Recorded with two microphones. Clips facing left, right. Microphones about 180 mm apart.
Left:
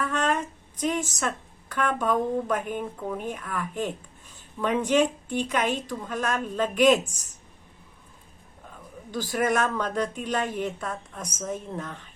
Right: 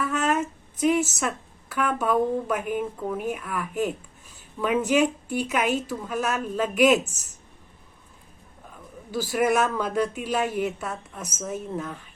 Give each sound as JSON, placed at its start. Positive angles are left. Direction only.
{"t": 0.0, "sound": "a sound", "side_deg": -10}
{"t": 1.7, "sound": "a woman's voice", "side_deg": -5}
{"t": 9.1, "sound": "a woman's voice", "side_deg": -10}